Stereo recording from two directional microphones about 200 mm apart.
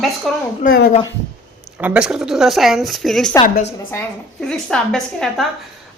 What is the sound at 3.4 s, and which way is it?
Speech, 25° left (ahead or behind).